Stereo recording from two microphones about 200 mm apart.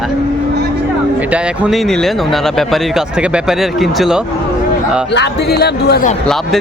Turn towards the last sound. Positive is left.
turn(degrees=0)  # may be behind; listen again after turning